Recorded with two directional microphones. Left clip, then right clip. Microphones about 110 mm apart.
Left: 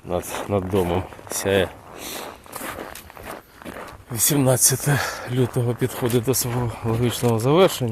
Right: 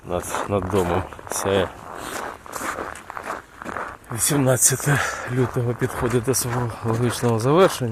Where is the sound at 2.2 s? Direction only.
Centre (ahead or behind).